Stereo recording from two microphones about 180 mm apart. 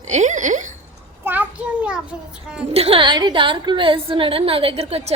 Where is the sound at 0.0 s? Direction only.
40° right (ahead or behind).